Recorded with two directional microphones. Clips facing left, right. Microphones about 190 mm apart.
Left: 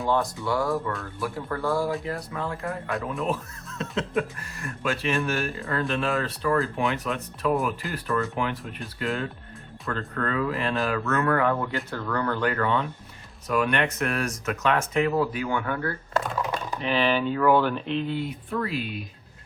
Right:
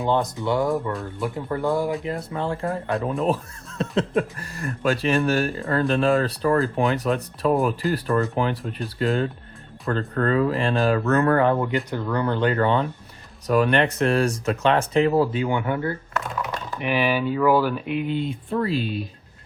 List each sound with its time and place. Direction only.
0.0 s speech: 20° right (ahead or behind)
11.9 s speech: 15° right (ahead or behind); by 19.0 s 30° right (ahead or behind)